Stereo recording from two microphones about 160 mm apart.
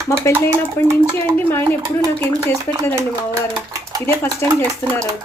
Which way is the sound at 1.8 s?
35° right (ahead or behind).